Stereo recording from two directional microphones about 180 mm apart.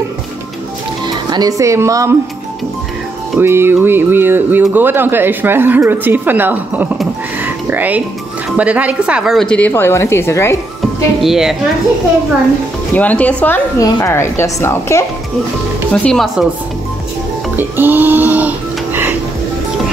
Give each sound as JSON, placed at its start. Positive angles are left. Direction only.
{"t": 1.0, "sound": "speech", "side_deg": -20}
{"t": 3.3, "sound": "a woman's voice", "side_deg": -15}
{"t": 11.1, "sound": "speech", "side_deg": 0}
{"t": 12.9, "sound": "a woman's voice", "side_deg": 10}
{"t": 15.9, "sound": "speech", "side_deg": 5}
{"t": 17.6, "sound": "speech", "side_deg": -10}